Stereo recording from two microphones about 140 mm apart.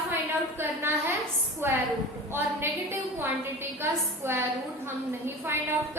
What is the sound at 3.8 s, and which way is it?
A woman's voice, 15° right (ahead or behind).